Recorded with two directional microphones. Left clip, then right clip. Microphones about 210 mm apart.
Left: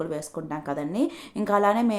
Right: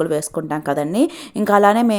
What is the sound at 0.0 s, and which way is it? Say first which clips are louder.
A woman's voice: right 11 dB; 35° right (ahead or behind).